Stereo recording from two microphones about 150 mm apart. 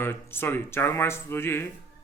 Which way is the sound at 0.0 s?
15° left (ahead or behind).